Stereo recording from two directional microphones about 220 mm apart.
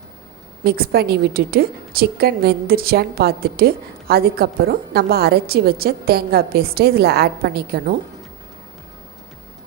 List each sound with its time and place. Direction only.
0.6 s a woman's voice: 45° right (ahead or behind)